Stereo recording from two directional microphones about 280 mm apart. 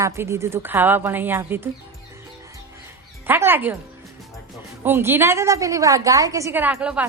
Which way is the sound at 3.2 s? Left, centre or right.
Centre.